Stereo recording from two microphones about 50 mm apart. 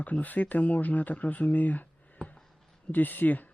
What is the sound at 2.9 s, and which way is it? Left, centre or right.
Speech, left.